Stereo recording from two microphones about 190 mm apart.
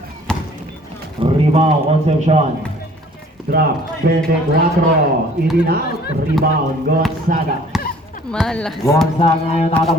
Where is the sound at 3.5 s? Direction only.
55° right (ahead or behind).